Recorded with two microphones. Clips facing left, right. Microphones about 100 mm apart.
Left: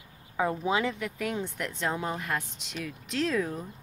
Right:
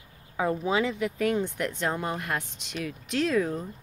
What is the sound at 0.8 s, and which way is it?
Speech, 10° right (ahead or behind).